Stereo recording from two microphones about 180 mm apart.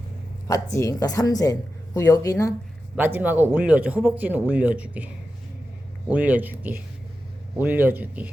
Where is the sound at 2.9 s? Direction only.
10° right (ahead or behind).